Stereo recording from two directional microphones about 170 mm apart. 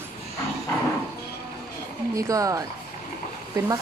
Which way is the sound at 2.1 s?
20° right (ahead or behind).